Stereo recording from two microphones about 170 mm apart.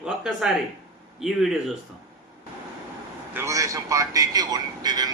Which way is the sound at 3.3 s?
15° right (ahead or behind).